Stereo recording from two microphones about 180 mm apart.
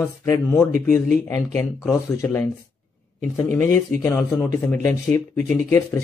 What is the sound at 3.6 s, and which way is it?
Speech, 10° left (ahead or behind).